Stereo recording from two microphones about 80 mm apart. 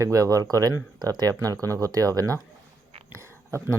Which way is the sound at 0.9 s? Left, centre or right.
Right.